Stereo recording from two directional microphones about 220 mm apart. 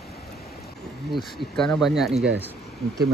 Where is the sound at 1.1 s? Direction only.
Centre (ahead or behind).